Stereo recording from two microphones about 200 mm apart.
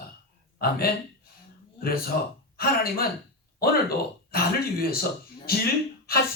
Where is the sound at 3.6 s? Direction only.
50° left (ahead or behind).